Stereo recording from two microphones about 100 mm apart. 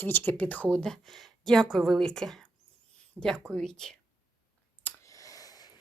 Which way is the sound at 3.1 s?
10° right (ahead or behind).